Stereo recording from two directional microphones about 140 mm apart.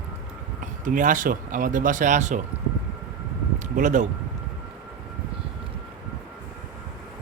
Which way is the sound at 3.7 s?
65° right (ahead or behind).